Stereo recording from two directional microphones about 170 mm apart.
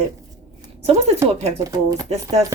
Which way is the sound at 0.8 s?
40° right (ahead or behind).